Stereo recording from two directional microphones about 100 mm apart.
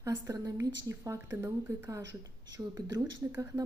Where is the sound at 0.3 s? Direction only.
35° right (ahead or behind).